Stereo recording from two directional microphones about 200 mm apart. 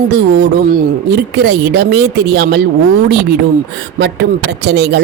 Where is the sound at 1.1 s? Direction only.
60° right (ahead or behind).